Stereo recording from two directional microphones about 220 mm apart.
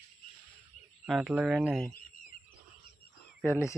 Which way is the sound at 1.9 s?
40° left (ahead or behind).